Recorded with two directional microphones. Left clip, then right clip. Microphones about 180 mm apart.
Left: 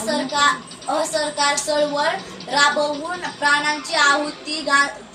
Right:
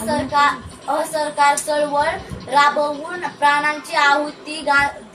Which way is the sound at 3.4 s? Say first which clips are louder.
Right 2 dB; 15° right (ahead or behind).